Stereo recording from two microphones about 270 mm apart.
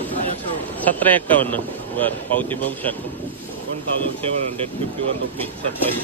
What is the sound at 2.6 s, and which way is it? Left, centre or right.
Speech, centre.